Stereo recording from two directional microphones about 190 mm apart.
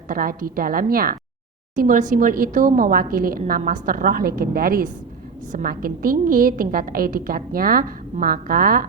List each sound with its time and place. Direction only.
0.1 s a woman's voice: 50° right (ahead or behind)